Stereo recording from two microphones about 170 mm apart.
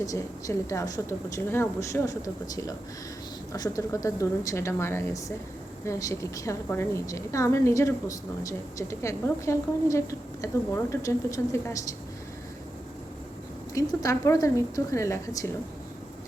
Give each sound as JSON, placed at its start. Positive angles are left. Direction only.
{"t": 0.0, "sound": "a woman's voice", "side_deg": 20}
{"t": 13.7, "sound": "a woman's voice", "side_deg": 20}